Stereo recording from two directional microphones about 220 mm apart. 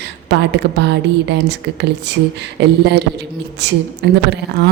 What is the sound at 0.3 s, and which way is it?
A woman's voice, 50° right (ahead or behind).